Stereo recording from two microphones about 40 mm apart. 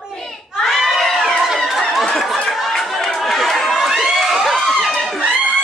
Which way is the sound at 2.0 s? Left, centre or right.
Centre.